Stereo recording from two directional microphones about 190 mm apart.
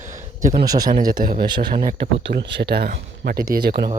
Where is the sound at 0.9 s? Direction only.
45° right (ahead or behind).